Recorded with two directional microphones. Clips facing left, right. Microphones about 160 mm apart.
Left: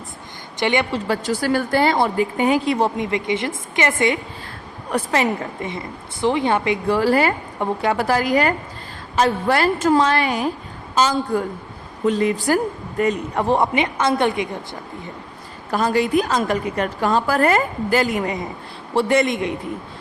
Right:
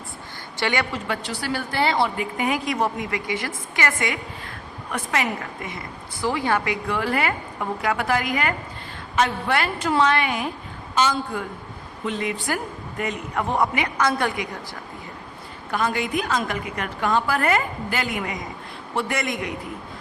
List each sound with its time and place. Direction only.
0.6 s a woman's voice: 20° left (ahead or behind); by 2.2 s 45° left (ahead or behind)
2.4 s a woman's voice: 30° left (ahead or behind)
15.7 s a woman's voice: 35° left (ahead or behind)